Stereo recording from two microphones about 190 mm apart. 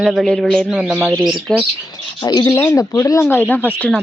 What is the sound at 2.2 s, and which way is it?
Speech, 20° left (ahead or behind).